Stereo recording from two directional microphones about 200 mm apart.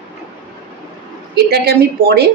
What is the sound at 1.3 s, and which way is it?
Speech, 55° right (ahead or behind).